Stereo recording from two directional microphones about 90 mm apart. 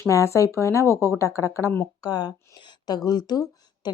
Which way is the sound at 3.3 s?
50° left (ahead or behind).